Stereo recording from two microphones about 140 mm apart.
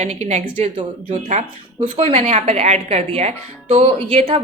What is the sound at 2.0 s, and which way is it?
Speech, 45° right (ahead or behind).